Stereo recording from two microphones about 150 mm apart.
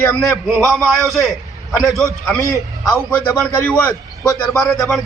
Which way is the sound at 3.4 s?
10° left (ahead or behind).